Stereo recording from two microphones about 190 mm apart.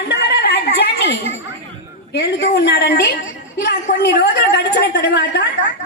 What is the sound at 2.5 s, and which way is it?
A woman's voice, 60° left (ahead or behind).